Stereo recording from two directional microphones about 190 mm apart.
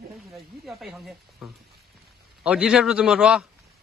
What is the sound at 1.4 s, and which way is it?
Frying, centre (ahead or behind).